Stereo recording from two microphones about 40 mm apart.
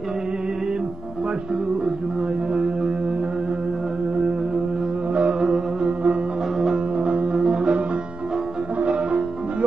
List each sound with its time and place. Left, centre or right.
2.5 s music: right
5.1 s music: right
7.3 s music: centre
8.7 s music: right